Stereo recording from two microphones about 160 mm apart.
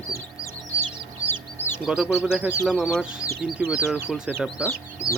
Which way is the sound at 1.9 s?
5° right (ahead or behind).